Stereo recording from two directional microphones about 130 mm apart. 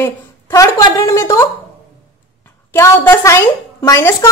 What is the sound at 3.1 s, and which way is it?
A woman's voice, 20° left (ahead or behind).